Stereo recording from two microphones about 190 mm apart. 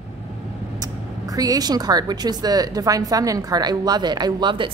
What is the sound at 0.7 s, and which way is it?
A woman's voice, 20° right (ahead or behind).